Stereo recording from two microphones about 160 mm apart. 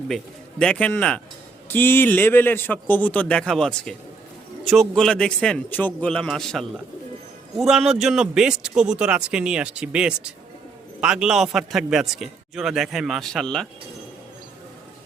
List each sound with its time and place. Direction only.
0.6 s a man's voice: 5° left (ahead or behind)